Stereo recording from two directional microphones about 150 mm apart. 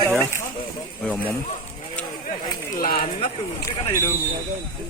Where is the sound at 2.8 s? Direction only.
65° left (ahead or behind).